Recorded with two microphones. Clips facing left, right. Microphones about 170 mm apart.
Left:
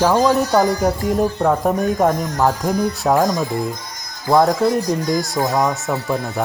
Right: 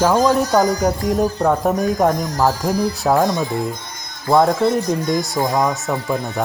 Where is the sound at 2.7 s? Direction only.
35° right (ahead or behind).